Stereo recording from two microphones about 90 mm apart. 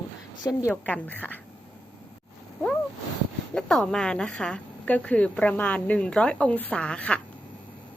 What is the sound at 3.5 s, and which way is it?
A woman's voice, 5° left (ahead or behind).